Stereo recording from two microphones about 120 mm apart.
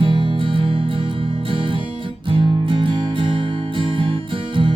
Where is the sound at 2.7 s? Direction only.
45° right (ahead or behind).